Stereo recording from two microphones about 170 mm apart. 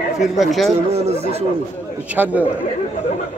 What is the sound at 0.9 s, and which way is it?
Speech, 40° right (ahead or behind).